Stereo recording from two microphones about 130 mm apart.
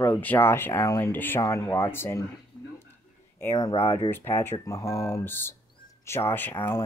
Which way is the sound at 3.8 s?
20° left (ahead or behind).